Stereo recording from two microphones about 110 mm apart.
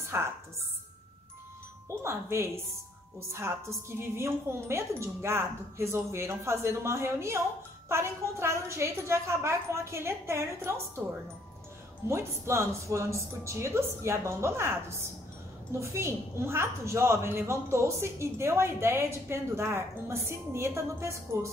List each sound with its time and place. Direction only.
0.1 s a woman's voice: 25° right (ahead or behind)
1.9 s a woman's voice: 25° right (ahead or behind)
12.1 s a woman's voice: 25° right (ahead or behind)